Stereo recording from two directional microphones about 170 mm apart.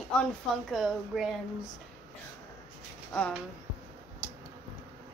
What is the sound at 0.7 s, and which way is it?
Speech, 5° right (ahead or behind).